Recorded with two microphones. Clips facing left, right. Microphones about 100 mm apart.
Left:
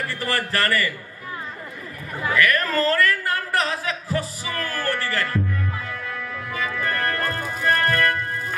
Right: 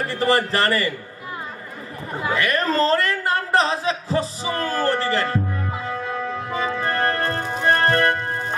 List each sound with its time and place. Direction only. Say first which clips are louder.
0.0 s a man's voice: right 6 dB; 25° right (ahead or behind)
2.1 s a sound: left 1 dB; 20° right (ahead or behind)
7.4 s music: right 3 dB; 35° right (ahead or behind)